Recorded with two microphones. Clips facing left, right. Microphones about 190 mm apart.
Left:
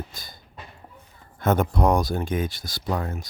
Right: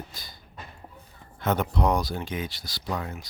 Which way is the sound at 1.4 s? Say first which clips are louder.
Left 4 dB; 50° left (ahead or behind).